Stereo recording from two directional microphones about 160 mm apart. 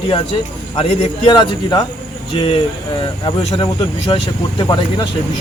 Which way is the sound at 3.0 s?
30° left (ahead or behind).